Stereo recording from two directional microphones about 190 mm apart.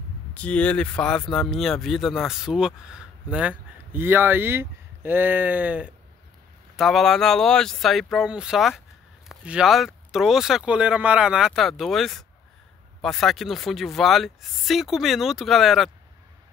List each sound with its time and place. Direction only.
0.3 s speech: 5° left (ahead or behind)